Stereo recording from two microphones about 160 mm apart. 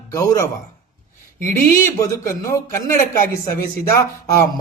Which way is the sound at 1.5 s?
20° left (ahead or behind).